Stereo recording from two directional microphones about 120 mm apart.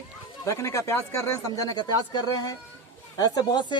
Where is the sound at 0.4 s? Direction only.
25° left (ahead or behind).